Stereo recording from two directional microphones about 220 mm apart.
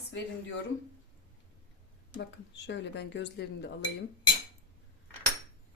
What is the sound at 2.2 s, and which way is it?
Speech, 50° left (ahead or behind).